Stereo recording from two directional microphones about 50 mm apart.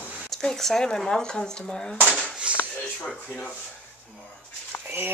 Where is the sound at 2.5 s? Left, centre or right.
Right.